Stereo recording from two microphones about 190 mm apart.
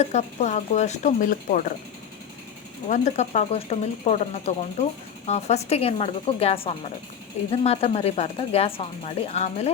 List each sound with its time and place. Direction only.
0.0 s speech: 35° left (ahead or behind)
2.9 s speech: 40° left (ahead or behind)